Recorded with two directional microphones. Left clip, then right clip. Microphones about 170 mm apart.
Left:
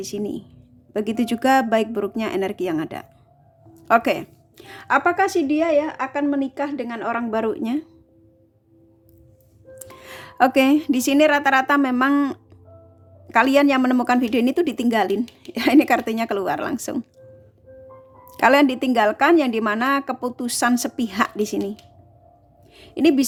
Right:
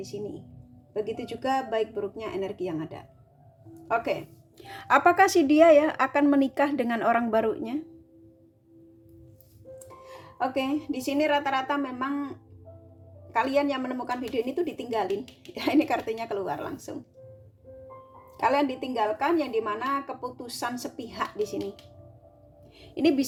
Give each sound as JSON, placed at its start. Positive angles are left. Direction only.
{"t": 0.1, "sound": "a woman's voice", "side_deg": 50}
{"t": 4.5, "sound": "a woman's voice", "side_deg": 20}
{"t": 10.0, "sound": "a woman's voice", "side_deg": 45}
{"t": 15.5, "sound": "speech", "side_deg": 35}
{"t": 18.3, "sound": "a woman's voice", "side_deg": 45}
{"t": 22.7, "sound": "a sound", "side_deg": 25}